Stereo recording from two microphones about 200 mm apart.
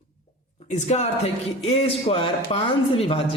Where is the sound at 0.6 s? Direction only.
35° left (ahead or behind).